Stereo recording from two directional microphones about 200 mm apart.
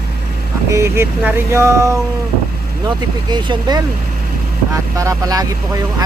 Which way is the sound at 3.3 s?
20° right (ahead or behind).